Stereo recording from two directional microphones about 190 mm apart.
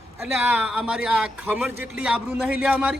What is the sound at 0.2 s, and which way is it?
A man's voice, 5° right (ahead or behind).